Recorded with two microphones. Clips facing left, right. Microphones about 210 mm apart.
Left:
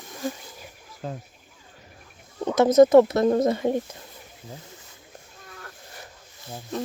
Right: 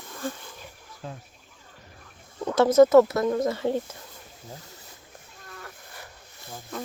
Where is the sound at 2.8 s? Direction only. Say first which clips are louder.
Left 2 dB; 20° left (ahead or behind).